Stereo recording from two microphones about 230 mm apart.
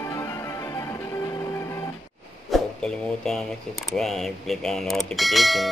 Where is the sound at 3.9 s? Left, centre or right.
Centre.